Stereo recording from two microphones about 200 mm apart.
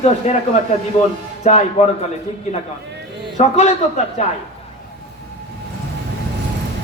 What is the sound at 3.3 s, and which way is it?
Speech, 35° left (ahead or behind).